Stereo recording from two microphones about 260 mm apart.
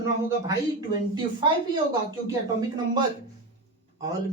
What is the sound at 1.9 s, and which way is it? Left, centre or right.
Speech, centre.